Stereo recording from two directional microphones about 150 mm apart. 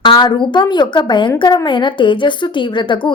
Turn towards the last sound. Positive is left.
turn(degrees=30)  # may be behind; listen again after turning